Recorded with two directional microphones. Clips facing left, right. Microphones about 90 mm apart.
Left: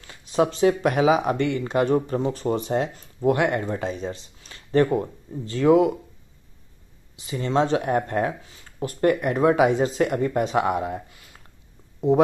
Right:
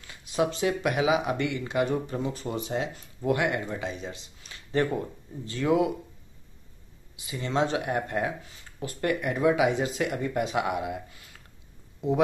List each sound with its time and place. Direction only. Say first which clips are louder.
0.0 s speech: left 5 dB; 35° left (ahead or behind)
7.3 s speech: left 5 dB; 35° left (ahead or behind)